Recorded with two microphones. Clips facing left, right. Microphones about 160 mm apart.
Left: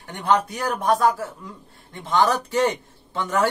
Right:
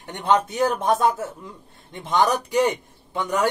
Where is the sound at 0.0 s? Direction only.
20° right (ahead or behind).